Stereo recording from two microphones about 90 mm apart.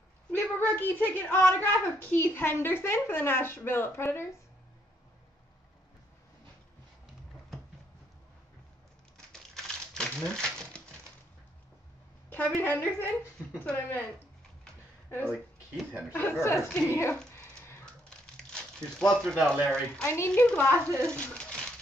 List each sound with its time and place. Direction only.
0.3 s a woman's voice: 20° left (ahead or behind)
9.3 s crumpling: 10° left (ahead or behind)
12.3 s a woman's voice: 20° left (ahead or behind)
15.0 s a woman's voice: 20° left (ahead or behind)
17.4 s a sound: 25° left (ahead or behind)
18.1 s crumpling: 10° left (ahead or behind)
19.4 s speech: 10° left (ahead or behind)
20.1 s a woman's voice: 25° left (ahead or behind)
20.4 s speech: 10° left (ahead or behind)